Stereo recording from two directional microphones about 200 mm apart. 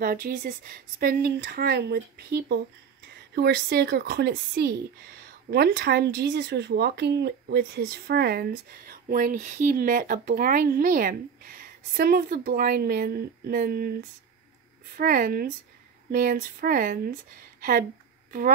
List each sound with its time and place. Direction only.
0.0 s speech: 45° right (ahead or behind)
15.0 s speech: 45° right (ahead or behind)
17.6 s a sound: 45° right (ahead or behind)